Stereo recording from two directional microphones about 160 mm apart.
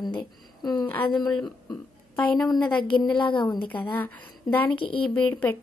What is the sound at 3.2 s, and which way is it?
Speech, 30° left (ahead or behind).